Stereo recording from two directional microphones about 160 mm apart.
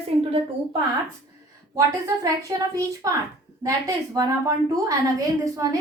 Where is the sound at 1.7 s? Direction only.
20° right (ahead or behind).